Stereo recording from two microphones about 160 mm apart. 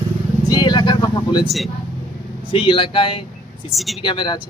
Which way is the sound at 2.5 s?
30° left (ahead or behind).